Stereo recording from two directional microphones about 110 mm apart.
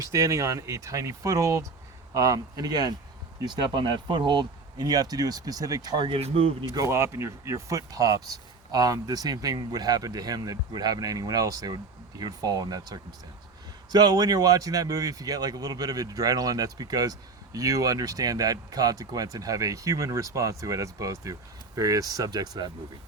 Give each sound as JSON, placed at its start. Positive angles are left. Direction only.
{"t": 0.0, "sound": "speech", "side_deg": -30}
{"t": 6.1, "sound": "speech", "side_deg": -60}
{"t": 6.7, "sound": "speech", "side_deg": -25}